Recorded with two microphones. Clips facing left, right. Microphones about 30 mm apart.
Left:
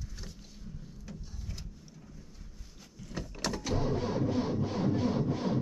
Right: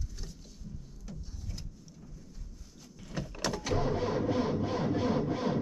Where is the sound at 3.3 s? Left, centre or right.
Centre.